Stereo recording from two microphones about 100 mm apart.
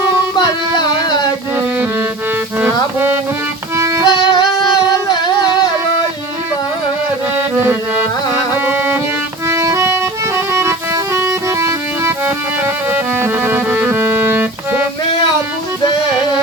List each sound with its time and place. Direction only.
0.3 s a sound: 45° left (ahead or behind)
3.8 s music: 30° right (ahead or behind)
4.1 s singing: 50° left (ahead or behind)
7.3 s music: 25° right (ahead or behind)
9.5 s music: 30° right (ahead or behind)